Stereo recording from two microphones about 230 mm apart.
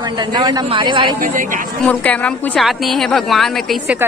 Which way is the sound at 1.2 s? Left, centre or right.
Right.